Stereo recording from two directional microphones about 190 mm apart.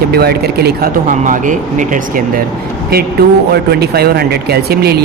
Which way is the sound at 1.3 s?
45° right (ahead or behind).